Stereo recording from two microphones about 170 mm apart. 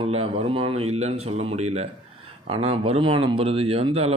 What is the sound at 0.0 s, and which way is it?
Speech, 35° right (ahead or behind).